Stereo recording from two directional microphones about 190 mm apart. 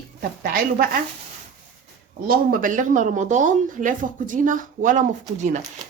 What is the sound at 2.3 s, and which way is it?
Speech, 50° right (ahead or behind).